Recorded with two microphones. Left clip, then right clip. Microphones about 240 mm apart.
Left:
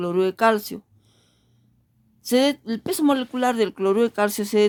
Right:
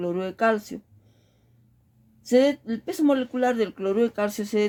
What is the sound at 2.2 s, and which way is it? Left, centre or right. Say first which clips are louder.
Speech: even; left.